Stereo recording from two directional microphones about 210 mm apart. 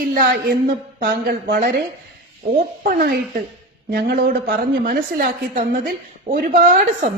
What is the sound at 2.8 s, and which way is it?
A man's voice, 45° right (ahead or behind).